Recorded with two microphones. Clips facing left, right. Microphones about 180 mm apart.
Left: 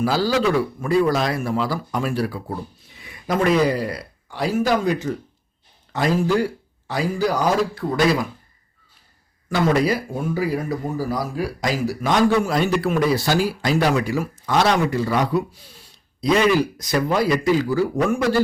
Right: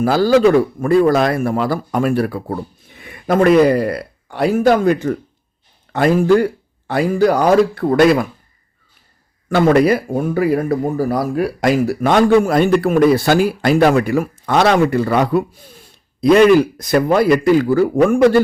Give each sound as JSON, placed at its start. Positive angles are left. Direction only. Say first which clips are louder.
{"t": 0.0, "sound": "speech", "louder": "right 8 dB", "side_deg": -50}
{"t": 9.5, "sound": "speech", "louder": "right 7 dB", "side_deg": -55}